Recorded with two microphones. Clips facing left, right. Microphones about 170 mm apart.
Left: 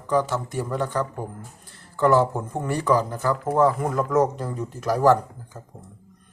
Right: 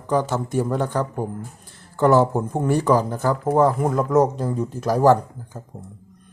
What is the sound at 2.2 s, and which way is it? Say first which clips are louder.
Speech: right 4 dB; 25° right (ahead or behind).